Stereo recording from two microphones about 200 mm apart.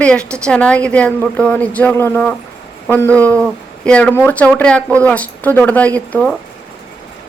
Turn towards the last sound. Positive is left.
turn(degrees=5)  # may be behind; listen again after turning